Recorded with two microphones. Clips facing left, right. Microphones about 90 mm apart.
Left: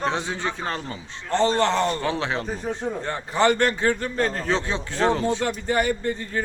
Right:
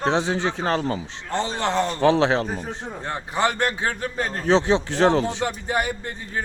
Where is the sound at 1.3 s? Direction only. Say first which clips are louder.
Left 3 dB; 10° right (ahead or behind).